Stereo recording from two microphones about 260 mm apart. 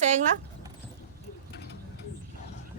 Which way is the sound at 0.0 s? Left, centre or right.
Right.